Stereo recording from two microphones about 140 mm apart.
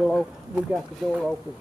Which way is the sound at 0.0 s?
Centre (ahead or behind).